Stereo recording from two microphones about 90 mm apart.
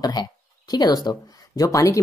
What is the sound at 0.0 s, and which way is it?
Speech, 50° left (ahead or behind).